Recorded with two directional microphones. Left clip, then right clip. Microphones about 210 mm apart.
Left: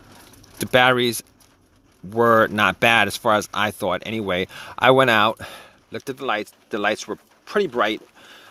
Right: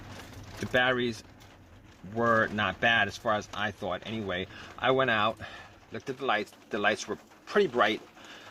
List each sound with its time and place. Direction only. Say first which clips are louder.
0.6 s speech: left 10 dB; 50° left (ahead or behind)
2.1 s speech: left 10 dB; 55° left (ahead or behind)